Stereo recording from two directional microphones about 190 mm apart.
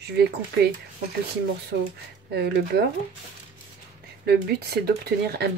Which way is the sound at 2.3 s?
60° right (ahead or behind).